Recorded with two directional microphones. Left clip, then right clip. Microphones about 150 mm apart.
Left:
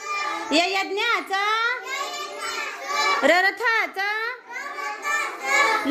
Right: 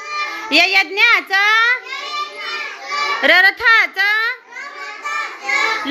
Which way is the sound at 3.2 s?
10° left (ahead or behind).